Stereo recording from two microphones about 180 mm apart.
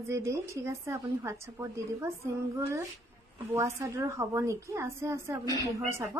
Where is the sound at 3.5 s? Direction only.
15° right (ahead or behind).